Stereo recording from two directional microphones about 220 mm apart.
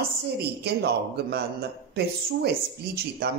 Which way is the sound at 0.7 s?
50° right (ahead or behind).